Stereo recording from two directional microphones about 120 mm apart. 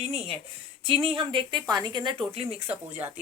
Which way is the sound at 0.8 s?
50° right (ahead or behind).